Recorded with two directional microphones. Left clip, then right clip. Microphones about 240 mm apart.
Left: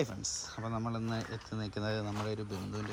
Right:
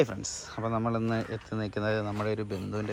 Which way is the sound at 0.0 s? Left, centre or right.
Centre.